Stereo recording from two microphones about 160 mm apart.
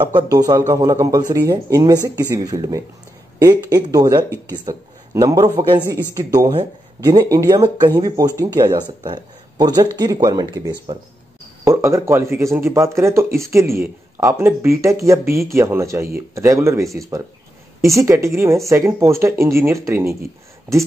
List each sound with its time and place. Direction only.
0.0 s speech: 25° right (ahead or behind)